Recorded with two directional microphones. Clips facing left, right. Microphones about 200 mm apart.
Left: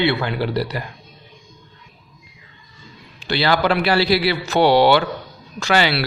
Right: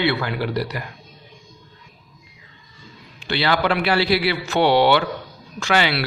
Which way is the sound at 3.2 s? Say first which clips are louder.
Left 2 dB; 40° left (ahead or behind).